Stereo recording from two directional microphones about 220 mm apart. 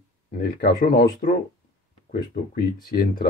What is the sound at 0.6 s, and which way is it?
Speech, 40° left (ahead or behind).